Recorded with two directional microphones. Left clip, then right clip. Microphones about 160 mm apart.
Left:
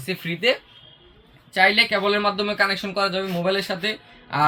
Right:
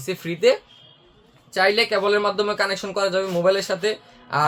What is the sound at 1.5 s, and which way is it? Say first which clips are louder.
A man's voice: left 1 dB; 50° right (ahead or behind).